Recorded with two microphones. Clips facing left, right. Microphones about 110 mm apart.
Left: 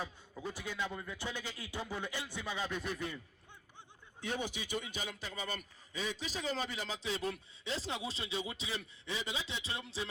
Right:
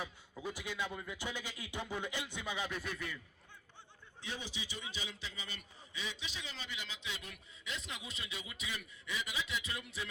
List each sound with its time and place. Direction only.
0.4 s speech: 15° right (ahead or behind)
2.6 s speech: 20° left (ahead or behind)
4.3 s a man's voice: 50° left (ahead or behind); by 10.1 s 30° left (ahead or behind)